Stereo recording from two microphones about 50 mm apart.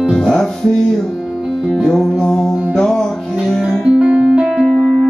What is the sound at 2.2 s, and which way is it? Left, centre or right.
Music, centre.